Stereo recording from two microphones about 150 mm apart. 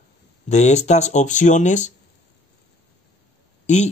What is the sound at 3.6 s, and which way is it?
Speech, 50° left (ahead or behind).